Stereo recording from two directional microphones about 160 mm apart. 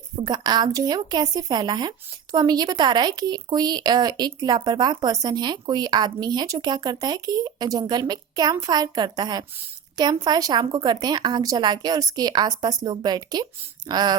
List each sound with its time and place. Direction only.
0.2 s speech: 25° right (ahead or behind)